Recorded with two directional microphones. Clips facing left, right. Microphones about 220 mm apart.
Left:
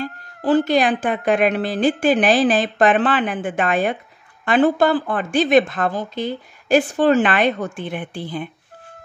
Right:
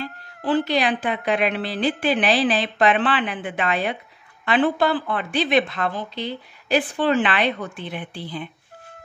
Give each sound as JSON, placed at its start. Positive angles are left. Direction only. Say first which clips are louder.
{"t": 0.0, "sound": "a woman's voice", "louder": "left 5 dB", "side_deg": 45}